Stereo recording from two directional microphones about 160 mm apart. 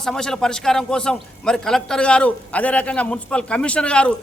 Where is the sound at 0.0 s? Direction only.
5° left (ahead or behind).